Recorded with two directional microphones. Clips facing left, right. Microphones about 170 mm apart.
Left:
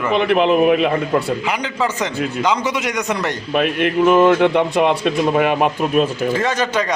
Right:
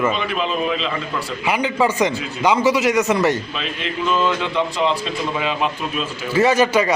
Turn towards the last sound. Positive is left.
turn(degrees=-10)  # may be behind; listen again after turning